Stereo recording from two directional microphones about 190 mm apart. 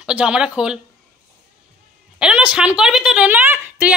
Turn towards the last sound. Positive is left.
turn(degrees=-10)  # may be behind; listen again after turning